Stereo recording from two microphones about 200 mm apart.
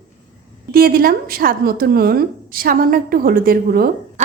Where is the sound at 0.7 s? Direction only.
50° right (ahead or behind).